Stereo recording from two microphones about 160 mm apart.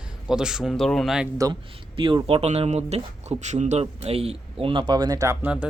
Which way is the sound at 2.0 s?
35° right (ahead or behind).